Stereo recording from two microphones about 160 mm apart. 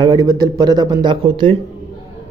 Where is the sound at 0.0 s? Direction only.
25° right (ahead or behind).